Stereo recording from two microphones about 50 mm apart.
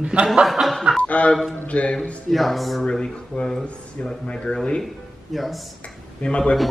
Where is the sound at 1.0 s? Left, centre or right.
Left.